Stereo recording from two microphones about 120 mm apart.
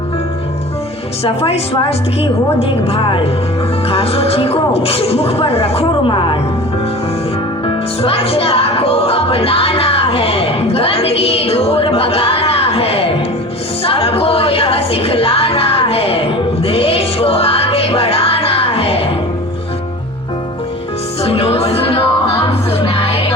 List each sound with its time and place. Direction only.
1.2 s a woman's voice: 55° left (ahead or behind)
7.6 s music: 50° left (ahead or behind)
21.2 s music: 55° left (ahead or behind)